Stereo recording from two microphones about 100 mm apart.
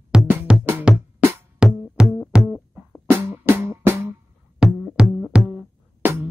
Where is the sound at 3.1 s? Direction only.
25° right (ahead or behind).